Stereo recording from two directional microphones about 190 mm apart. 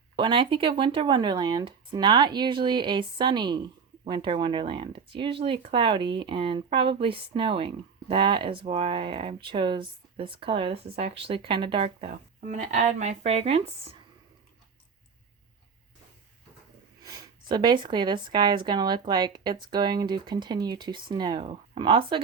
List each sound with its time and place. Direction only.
0.2 s speech: 25° right (ahead or behind)
17.0 s speech: 20° right (ahead or behind)